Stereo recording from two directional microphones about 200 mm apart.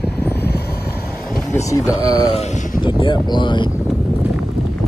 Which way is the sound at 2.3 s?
35° left (ahead or behind).